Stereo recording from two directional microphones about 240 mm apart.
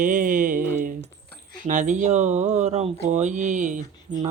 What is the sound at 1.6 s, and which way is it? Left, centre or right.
Speech, right.